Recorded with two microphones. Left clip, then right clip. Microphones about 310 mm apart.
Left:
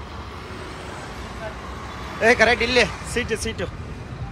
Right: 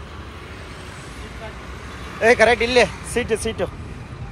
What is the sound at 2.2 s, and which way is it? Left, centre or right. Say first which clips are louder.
Speech: right 2 dB; centre.